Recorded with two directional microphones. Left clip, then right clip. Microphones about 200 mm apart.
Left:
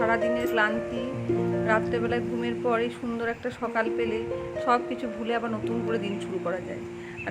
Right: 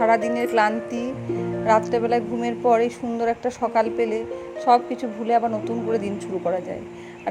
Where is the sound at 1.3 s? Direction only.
Centre (ahead or behind).